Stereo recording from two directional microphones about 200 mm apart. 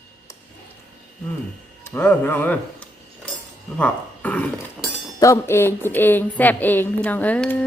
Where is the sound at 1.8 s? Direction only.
10° left (ahead or behind).